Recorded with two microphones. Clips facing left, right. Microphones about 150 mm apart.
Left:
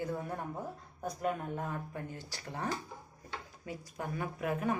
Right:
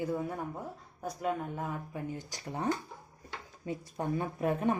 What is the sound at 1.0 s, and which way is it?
Speech, centre (ahead or behind).